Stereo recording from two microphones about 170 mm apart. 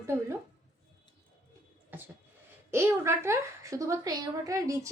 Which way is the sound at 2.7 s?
15° right (ahead or behind).